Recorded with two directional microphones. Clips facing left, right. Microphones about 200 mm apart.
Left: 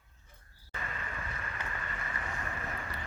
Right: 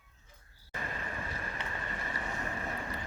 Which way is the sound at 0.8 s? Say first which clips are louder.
Right 2 dB; 35° right (ahead or behind).